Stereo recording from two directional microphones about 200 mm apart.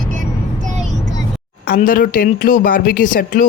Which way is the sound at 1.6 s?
45° left (ahead or behind).